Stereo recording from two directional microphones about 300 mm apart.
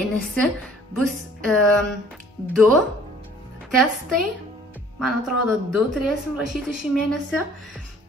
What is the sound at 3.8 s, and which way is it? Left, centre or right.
Speech, centre.